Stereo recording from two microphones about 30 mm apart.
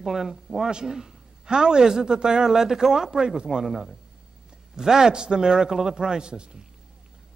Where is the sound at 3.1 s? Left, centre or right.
Right.